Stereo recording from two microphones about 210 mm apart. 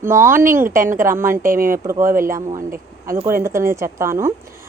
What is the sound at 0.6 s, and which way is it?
Speech, 40° right (ahead or behind).